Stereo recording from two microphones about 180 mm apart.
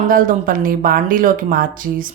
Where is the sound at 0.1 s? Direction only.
50° right (ahead or behind).